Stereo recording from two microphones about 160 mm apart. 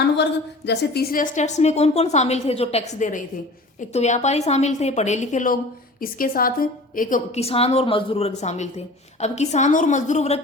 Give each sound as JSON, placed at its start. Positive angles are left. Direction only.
{"t": 0.2, "sound": "a woman's voice", "side_deg": 90}
{"t": 6.0, "sound": "a woman's voice", "side_deg": 65}
{"t": 7.3, "sound": "a woman's voice", "side_deg": 40}